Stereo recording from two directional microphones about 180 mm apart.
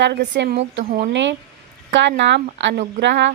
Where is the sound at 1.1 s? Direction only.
80° right.